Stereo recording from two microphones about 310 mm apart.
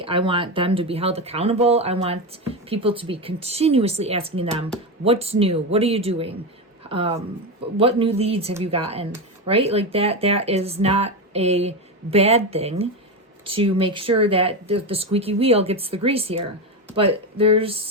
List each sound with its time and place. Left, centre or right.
0.0 s a woman's voice: centre